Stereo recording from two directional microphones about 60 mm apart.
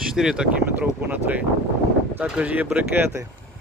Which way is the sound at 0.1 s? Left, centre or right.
Centre.